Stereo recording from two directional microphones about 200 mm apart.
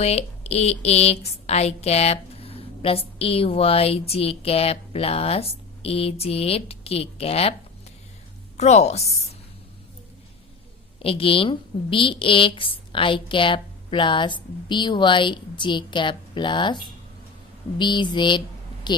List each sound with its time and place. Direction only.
0.0 s speech: 30° left (ahead or behind)
8.5 s a woman's voice: 35° left (ahead or behind)
11.0 s speech: 30° left (ahead or behind)